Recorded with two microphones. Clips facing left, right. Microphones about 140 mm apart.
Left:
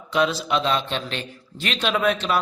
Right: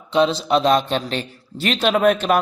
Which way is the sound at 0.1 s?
25° right (ahead or behind).